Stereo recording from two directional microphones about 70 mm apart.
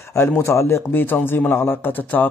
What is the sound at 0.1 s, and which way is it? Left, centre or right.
Speech, left.